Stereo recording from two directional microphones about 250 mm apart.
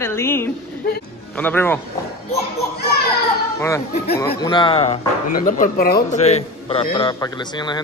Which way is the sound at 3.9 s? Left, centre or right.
Left.